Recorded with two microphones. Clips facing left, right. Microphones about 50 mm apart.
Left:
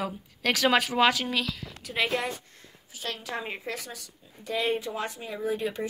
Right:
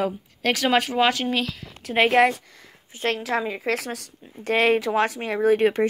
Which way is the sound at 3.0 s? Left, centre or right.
Right.